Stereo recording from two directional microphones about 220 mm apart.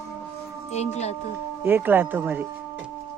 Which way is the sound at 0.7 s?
30° left (ahead or behind).